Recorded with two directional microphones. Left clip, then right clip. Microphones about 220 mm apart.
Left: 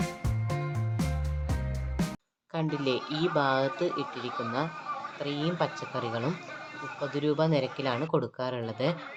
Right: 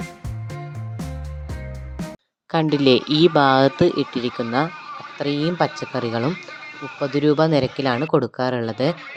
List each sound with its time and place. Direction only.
2.5 s speech: 40° right (ahead or behind)